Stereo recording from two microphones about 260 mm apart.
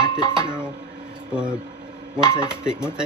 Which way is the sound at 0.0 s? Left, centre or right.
Centre.